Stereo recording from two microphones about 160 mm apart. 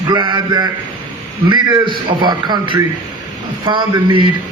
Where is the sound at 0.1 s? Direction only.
30° right (ahead or behind).